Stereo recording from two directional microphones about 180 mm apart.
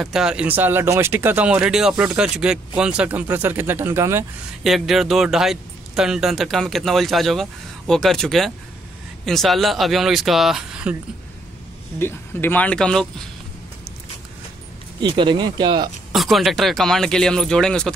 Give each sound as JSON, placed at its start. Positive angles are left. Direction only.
{"t": 0.0, "sound": "speech", "side_deg": -5}
{"t": 4.6, "sound": "speech", "side_deg": 0}
{"t": 12.0, "sound": "speech", "side_deg": 10}
{"t": 15.0, "sound": "speech", "side_deg": -25}
{"t": 16.1, "sound": "speech", "side_deg": 0}